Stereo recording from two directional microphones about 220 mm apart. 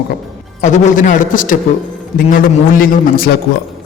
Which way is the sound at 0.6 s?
35° left (ahead or behind).